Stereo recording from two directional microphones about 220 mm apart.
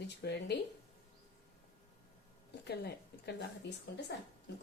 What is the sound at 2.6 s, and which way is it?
A woman's voice, 45° left (ahead or behind).